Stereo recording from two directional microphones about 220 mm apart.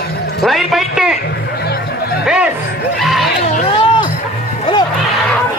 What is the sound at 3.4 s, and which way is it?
Chatter, 30° left (ahead or behind).